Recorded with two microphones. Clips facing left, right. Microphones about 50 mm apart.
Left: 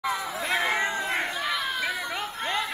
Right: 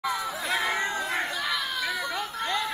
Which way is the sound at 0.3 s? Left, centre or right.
Left.